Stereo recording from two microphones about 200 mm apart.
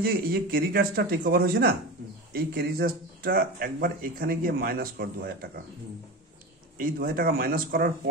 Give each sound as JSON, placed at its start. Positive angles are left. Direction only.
{"t": 0.0, "sound": "speech", "side_deg": -50}
{"t": 6.8, "sound": "speech", "side_deg": -45}